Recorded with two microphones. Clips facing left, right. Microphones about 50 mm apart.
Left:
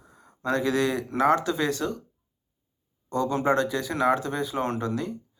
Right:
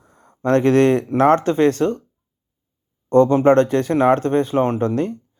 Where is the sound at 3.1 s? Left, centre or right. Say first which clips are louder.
Right 11 dB; right.